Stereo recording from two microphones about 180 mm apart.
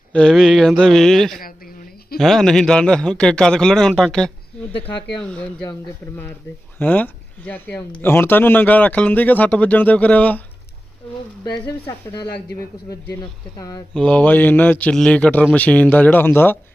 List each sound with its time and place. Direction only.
0.1 s a man's voice: 5° left (ahead or behind)
1.4 s a sound: 55° left (ahead or behind)
2.1 s a man's voice: centre (ahead or behind)
11.9 s speech: 20° left (ahead or behind)
13.6 s speech: 20° left (ahead or behind)
13.9 s speech: 5° left (ahead or behind)